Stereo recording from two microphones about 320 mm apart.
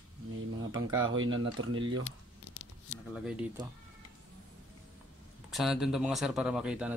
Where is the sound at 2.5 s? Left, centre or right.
Left.